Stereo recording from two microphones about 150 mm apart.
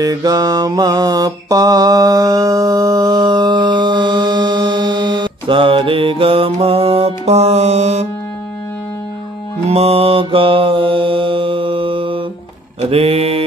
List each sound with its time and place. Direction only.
0.0 s mantra: 25° right (ahead or behind); by 8.1 s 50° right (ahead or behind)
9.7 s mantra: 40° right (ahead or behind)